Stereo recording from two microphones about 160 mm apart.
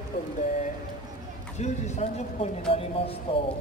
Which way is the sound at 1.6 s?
45° left (ahead or behind).